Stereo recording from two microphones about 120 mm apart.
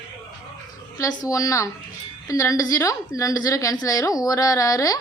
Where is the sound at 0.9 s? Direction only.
30° left (ahead or behind).